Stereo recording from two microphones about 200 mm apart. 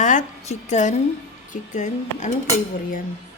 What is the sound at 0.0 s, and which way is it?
A woman's voice, 40° left (ahead or behind).